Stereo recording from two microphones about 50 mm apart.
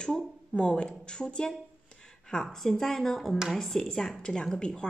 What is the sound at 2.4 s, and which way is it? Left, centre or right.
A woman's voice, centre.